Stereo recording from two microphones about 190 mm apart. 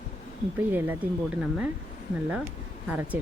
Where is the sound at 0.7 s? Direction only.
10° right (ahead or behind).